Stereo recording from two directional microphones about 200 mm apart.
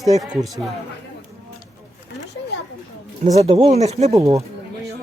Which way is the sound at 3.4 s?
30° right (ahead or behind).